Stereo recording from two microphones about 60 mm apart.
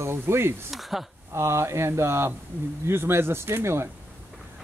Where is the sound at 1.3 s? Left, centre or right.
Right.